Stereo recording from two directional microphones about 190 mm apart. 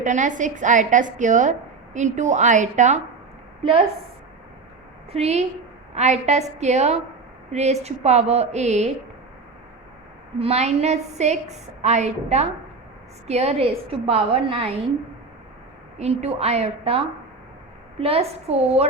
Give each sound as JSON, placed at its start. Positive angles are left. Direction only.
{"t": 0.0, "sound": "a woman's voice", "side_deg": -40}
{"t": 5.1, "sound": "a woman's voice", "side_deg": -35}
{"t": 10.3, "sound": "a woman's voice", "side_deg": -30}
{"t": 16.0, "sound": "a woman's voice", "side_deg": -35}
{"t": 18.0, "sound": "a woman's voice", "side_deg": -30}